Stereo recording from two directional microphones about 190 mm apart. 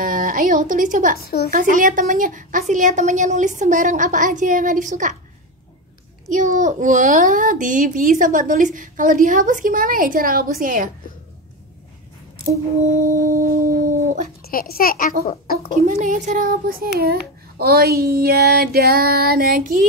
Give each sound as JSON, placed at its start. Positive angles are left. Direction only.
{"t": 0.0, "sound": "a woman's voice", "side_deg": -45}
{"t": 1.2, "sound": "speech", "side_deg": 55}
{"t": 1.5, "sound": "a child's voice", "side_deg": -45}
{"t": 6.3, "sound": "a child's voice", "side_deg": -40}
{"t": 13.1, "sound": "a child's voice", "side_deg": -45}
{"t": 14.4, "sound": "a child's voice", "side_deg": 50}
{"t": 15.9, "sound": "a child's voice", "side_deg": -40}